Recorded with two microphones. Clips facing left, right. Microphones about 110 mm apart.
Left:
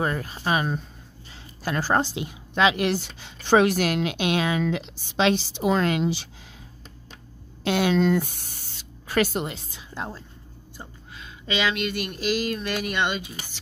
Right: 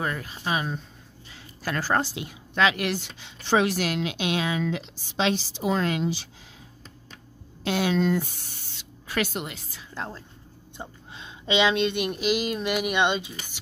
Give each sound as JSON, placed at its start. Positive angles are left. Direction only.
{"t": 0.0, "sound": "speech", "side_deg": 35}
{"t": 1.3, "sound": "a woman's voice", "side_deg": 20}
{"t": 3.2, "sound": "speech", "side_deg": 45}
{"t": 7.6, "sound": "speech", "side_deg": 70}
{"t": 8.7, "sound": "speech", "side_deg": 40}
{"t": 10.8, "sound": "speech", "side_deg": -25}